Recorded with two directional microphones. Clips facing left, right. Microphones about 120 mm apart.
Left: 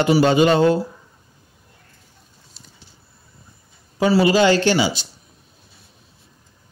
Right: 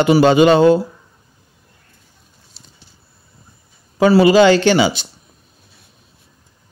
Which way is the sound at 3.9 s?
70° right (ahead or behind).